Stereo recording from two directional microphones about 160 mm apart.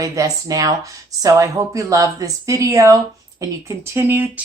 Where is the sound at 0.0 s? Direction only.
20° right (ahead or behind).